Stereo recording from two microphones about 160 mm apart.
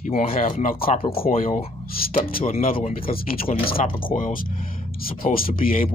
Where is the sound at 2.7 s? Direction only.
35° left (ahead or behind).